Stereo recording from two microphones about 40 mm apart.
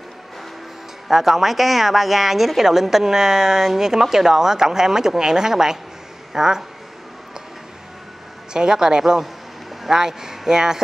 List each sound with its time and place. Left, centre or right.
1.0 s a woman's voice: centre
8.5 s a woman's voice: centre